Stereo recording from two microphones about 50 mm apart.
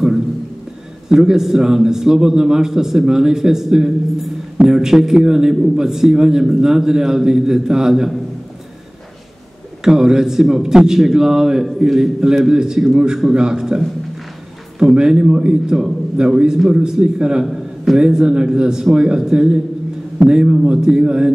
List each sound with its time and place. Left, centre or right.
1.0 s a man's voice: centre
9.8 s a man's voice: centre